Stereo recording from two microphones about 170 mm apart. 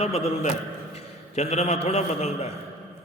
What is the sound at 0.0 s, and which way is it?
A man's voice, 40° left (ahead or behind).